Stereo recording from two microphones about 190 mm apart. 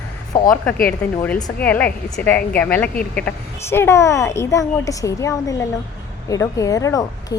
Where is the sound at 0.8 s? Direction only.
10° left (ahead or behind).